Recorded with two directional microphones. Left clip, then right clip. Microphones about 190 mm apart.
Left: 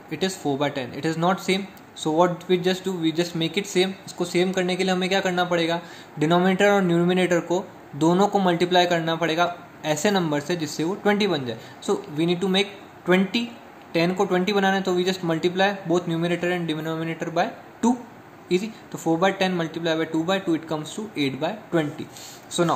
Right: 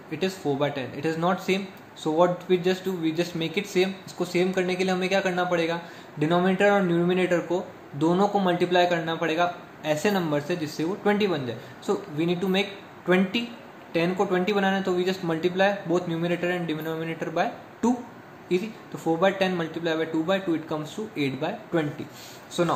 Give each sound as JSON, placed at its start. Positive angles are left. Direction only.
{"t": 0.1, "sound": "speech", "side_deg": 30}